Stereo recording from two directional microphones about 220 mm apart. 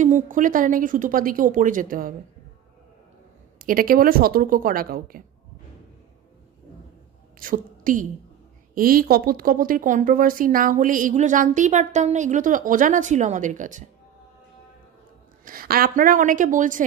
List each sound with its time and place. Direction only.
0.0 s speech: 35° right (ahead or behind)
3.5 s speech: 40° right (ahead or behind)
7.3 s a woman's voice: 40° right (ahead or behind)
15.4 s speech: 40° right (ahead or behind)